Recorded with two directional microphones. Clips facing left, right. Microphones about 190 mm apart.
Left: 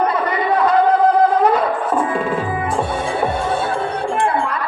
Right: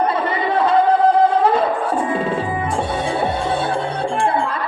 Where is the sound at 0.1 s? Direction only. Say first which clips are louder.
Left 1 dB; 30° right (ahead or behind).